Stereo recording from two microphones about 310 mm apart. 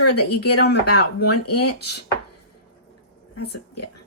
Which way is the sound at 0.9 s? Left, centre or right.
Left.